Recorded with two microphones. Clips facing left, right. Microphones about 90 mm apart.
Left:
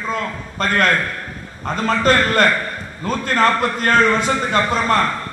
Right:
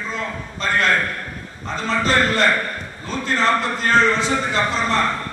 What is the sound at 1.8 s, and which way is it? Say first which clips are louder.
A man's voice: left 3 dB; 50° left (ahead or behind).